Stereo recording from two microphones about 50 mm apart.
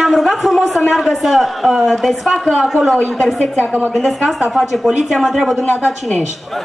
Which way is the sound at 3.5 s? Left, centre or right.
Left.